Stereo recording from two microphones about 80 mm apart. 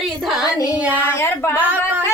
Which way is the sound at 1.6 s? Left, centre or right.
Right.